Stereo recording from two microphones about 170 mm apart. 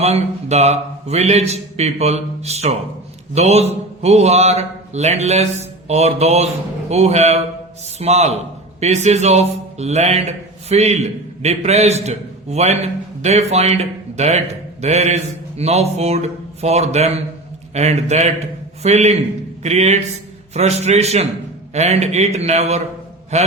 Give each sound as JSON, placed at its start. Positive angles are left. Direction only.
{"t": 0.0, "sound": "a man's voice", "side_deg": -40}